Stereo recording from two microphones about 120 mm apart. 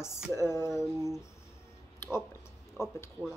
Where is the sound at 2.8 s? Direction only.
25° left (ahead or behind).